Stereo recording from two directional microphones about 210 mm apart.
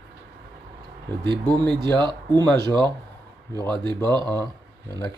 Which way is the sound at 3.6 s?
20° right (ahead or behind).